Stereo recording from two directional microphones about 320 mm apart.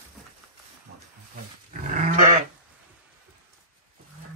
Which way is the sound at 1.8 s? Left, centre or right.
Right.